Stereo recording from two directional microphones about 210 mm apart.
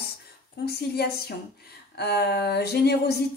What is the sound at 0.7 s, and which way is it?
A woman's voice, 50° left (ahead or behind).